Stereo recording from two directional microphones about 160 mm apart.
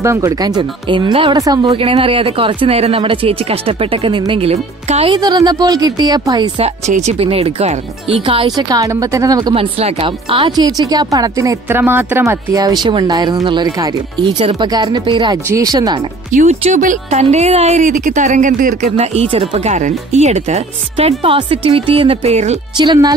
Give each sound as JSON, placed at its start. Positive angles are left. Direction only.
{"t": 0.0, "sound": "speech", "side_deg": -20}
{"t": 5.1, "sound": "speech", "side_deg": -25}
{"t": 6.9, "sound": "speech", "side_deg": -45}
{"t": 8.5, "sound": "speech", "side_deg": -25}
{"t": 16.3, "sound": "speech", "side_deg": -50}